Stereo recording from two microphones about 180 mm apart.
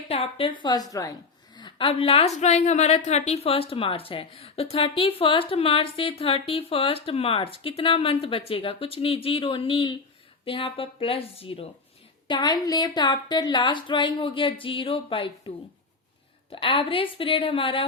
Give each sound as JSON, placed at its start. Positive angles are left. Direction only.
{"t": 0.1, "sound": "a woman's voice", "side_deg": 30}